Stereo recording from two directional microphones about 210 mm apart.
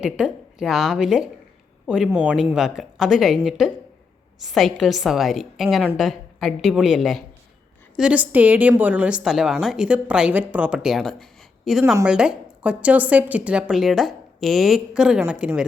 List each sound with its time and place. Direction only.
0.0 s a woman's voice: centre (ahead or behind)